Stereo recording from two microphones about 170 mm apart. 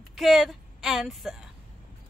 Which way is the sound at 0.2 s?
Centre (ahead or behind).